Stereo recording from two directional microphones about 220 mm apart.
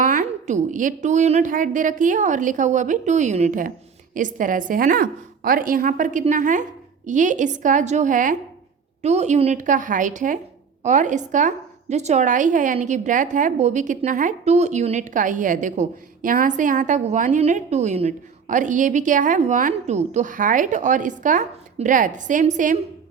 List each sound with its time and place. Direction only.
0.0 s a woman's voice: 35° right (ahead or behind)